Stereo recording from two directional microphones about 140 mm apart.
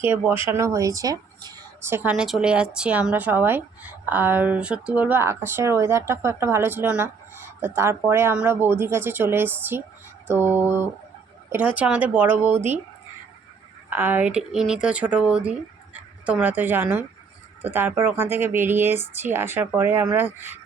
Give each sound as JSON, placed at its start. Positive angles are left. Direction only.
{"t": 0.0, "sound": "speech", "side_deg": -15}
{"t": 1.9, "sound": "a woman's voice", "side_deg": -10}
{"t": 13.9, "sound": "a woman's voice", "side_deg": -10}